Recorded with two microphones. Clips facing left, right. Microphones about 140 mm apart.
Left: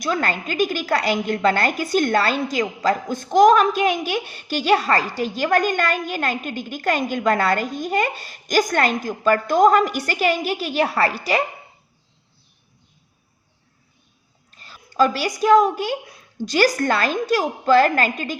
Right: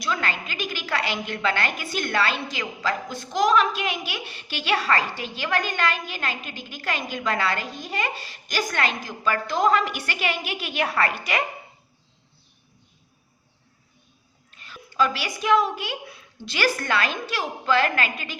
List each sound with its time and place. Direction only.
0.0 s a woman's voice: 45° left (ahead or behind)
14.5 s a woman's voice: 35° left (ahead or behind)